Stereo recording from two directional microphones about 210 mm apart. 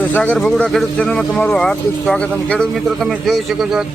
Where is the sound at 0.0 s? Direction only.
5° left (ahead or behind).